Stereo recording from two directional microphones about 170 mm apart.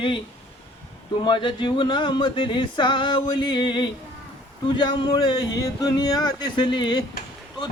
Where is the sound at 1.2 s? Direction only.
25° left (ahead or behind).